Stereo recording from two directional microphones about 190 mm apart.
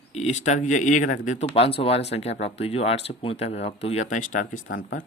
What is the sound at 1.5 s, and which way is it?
Speech, 30° left (ahead or behind).